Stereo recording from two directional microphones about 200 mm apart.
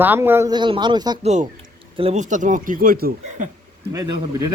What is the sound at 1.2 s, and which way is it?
Speech, 35° right (ahead or behind).